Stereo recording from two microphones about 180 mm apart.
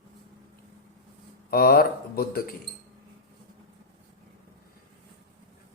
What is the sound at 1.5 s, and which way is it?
Speech, 55° left (ahead or behind).